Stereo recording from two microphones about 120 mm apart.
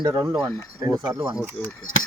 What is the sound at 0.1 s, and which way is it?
Speech, 30° right (ahead or behind).